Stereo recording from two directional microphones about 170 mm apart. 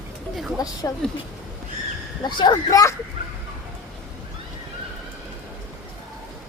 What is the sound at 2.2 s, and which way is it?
Speech, 25° left (ahead or behind).